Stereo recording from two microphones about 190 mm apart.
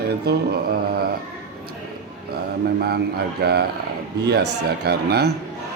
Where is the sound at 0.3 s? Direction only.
60° right (ahead or behind).